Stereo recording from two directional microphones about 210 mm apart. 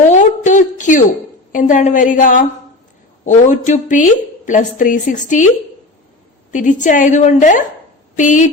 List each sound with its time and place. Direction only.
0.1 s a sound: 35° left (ahead or behind)
1.5 s a woman's voice: 35° left (ahead or behind)
6.5 s a woman's voice: 35° left (ahead or behind)